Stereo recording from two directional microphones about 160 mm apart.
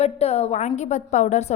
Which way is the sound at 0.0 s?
40° left (ahead or behind).